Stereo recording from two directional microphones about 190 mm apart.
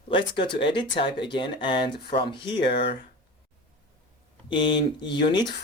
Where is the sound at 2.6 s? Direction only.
60° left (ahead or behind).